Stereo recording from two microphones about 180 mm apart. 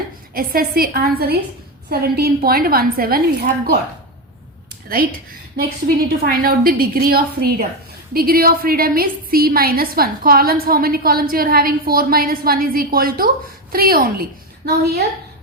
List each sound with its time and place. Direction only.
0.3 s a woman's voice: 55° right (ahead or behind)
5.5 s a woman's voice: 55° right (ahead or behind)